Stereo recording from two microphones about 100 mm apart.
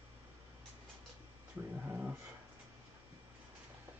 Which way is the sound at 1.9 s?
15° right (ahead or behind).